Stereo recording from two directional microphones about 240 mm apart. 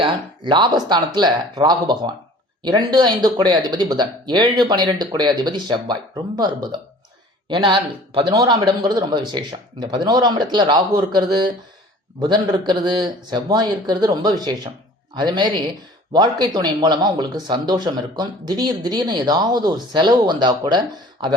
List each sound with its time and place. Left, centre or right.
0.0 s speech: centre